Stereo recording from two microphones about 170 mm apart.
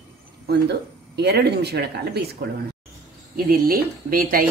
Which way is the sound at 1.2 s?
75° right (ahead or behind).